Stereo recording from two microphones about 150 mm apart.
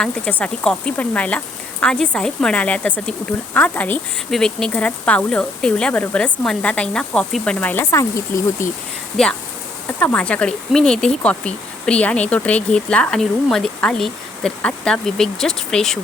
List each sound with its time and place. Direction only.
0.0 s speech: 10° left (ahead or behind)
9.2 s speech: 5° left (ahead or behind)